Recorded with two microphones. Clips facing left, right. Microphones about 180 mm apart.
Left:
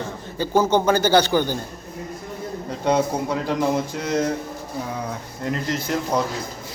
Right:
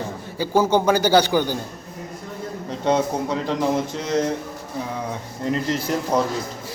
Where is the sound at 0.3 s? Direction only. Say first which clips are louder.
Even; 10° right (ahead or behind).